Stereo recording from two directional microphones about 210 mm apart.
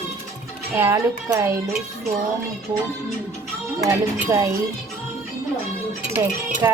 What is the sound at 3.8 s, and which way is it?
Speech, 15° right (ahead or behind).